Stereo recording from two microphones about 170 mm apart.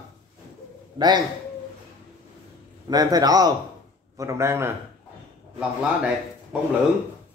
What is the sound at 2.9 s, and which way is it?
Speech, 25° right (ahead or behind).